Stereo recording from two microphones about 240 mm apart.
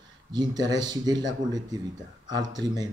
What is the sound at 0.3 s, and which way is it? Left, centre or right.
Speech, centre.